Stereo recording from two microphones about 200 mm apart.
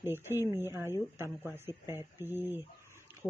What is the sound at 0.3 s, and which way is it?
Speech, 10° right (ahead or behind).